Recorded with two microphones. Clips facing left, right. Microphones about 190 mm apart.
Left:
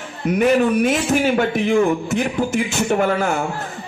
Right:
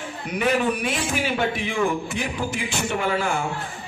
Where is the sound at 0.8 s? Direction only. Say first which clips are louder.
Left 8 dB; 45° left (ahead or behind).